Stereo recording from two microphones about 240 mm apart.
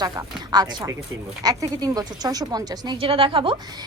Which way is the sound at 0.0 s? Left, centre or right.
Centre.